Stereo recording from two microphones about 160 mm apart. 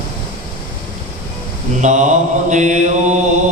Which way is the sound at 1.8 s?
50° right (ahead or behind).